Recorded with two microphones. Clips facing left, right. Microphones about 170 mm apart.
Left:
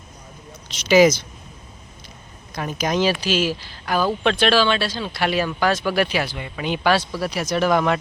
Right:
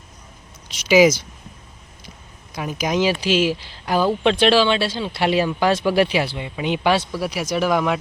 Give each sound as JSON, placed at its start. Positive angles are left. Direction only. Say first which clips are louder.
{"t": 0.9, "sound": "speech", "louder": "even", "side_deg": -10}
{"t": 2.5, "sound": "speech", "louder": "even", "side_deg": -10}